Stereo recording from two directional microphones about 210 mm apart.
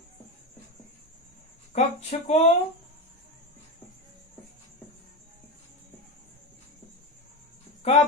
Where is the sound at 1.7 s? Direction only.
30° left (ahead or behind).